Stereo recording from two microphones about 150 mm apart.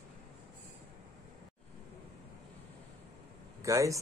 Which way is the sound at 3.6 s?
20° right (ahead or behind).